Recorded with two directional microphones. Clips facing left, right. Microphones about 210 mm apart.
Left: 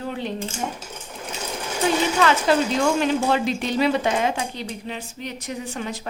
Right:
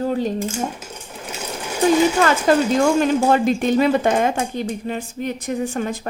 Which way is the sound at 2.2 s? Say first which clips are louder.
Right 3 dB; 45° right (ahead or behind).